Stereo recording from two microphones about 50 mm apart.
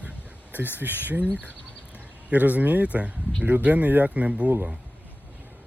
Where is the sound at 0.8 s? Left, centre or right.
Right.